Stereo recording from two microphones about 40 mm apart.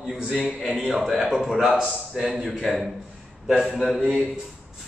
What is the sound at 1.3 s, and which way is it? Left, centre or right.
Speech, centre.